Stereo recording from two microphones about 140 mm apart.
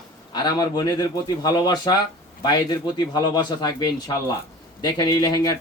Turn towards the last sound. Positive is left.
turn(degrees=30)  # may be behind; listen again after turning